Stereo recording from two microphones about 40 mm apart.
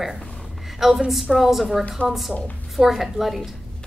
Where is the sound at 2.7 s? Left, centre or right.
Centre.